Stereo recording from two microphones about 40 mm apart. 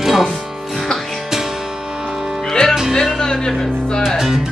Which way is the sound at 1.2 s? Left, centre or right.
Centre.